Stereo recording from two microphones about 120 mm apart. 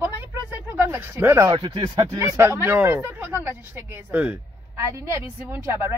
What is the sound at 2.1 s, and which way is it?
Speech, 20° right (ahead or behind).